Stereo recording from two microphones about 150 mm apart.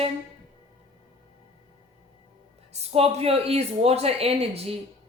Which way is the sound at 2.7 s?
45° right (ahead or behind).